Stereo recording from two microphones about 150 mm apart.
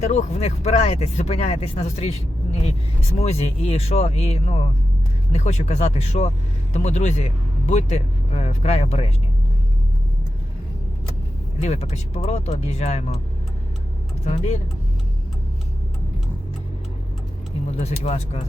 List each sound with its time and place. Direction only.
0.0 s speech: 50° left (ahead or behind)
11.6 s speech: 45° left (ahead or behind)
14.3 s speech: 50° left (ahead or behind)
17.7 s speech: 45° left (ahead or behind)